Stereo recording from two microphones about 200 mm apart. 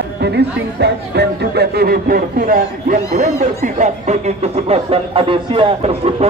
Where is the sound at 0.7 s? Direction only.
55° right (ahead or behind).